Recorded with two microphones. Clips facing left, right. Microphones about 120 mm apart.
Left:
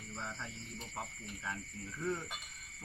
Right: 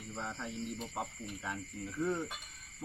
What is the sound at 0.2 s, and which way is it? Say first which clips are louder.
Speech: right 6 dB; 20° right (ahead or behind).